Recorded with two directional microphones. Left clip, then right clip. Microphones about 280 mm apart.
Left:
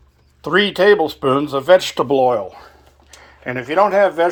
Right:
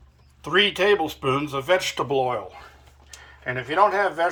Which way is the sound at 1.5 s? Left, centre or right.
Left.